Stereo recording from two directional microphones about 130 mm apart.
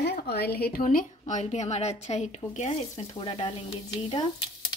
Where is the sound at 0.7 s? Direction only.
85° left; by 2.7 s 60° left (ahead or behind).